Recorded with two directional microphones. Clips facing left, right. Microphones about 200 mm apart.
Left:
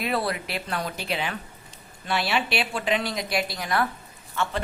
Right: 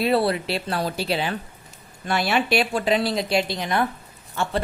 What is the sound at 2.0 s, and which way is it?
Speech, 45° right (ahead or behind).